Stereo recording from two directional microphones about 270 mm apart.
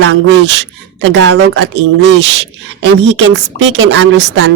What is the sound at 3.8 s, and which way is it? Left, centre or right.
Speech, right.